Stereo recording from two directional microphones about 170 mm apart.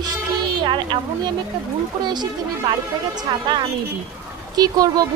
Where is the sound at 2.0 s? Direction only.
25° right (ahead or behind).